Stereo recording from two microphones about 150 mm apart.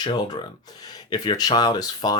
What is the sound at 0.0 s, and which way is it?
Speech, 25° left (ahead or behind).